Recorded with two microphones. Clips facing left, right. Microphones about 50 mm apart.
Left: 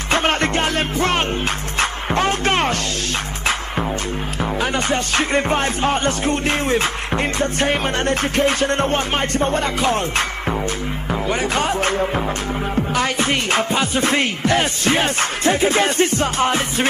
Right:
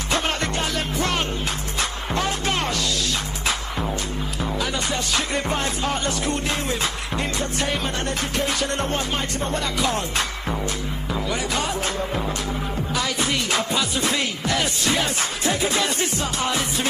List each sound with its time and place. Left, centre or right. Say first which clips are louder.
0.1 s music: left 6 dB; left
4.6 s music: left 6 dB; left
11.2 s music: left 6 dB; left